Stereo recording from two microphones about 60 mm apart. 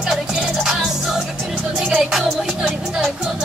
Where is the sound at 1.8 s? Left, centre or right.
Centre.